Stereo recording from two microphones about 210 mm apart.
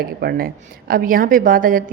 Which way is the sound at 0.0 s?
45° right (ahead or behind).